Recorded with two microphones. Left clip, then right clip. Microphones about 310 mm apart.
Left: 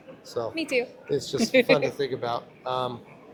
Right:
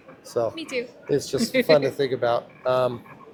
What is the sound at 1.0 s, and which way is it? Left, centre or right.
Speech, right.